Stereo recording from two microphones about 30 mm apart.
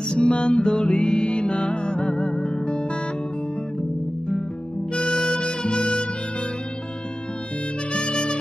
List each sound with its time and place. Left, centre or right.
0.1 s music: left
4.9 s music: centre
5.4 s music: left
7.9 s harmonica: left